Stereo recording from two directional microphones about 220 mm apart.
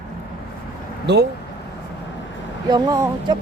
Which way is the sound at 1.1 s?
50° right (ahead or behind).